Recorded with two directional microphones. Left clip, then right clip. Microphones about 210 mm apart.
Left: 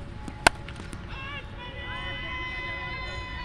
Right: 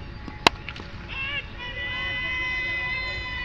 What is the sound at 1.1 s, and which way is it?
Vehicle, 60° left (ahead or behind).